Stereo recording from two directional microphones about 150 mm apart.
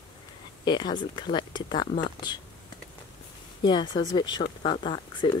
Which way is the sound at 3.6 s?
30° left (ahead or behind).